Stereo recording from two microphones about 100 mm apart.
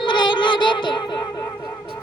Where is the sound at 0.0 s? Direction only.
50° left (ahead or behind).